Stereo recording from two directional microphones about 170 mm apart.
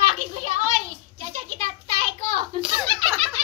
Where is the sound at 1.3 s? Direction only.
40° right (ahead or behind).